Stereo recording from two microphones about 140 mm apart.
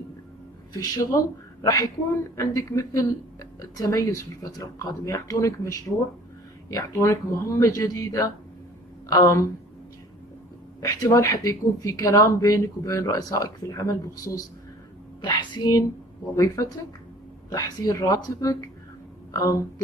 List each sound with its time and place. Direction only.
0.7 s speech: 25° left (ahead or behind)
10.8 s a woman's voice: 25° left (ahead or behind)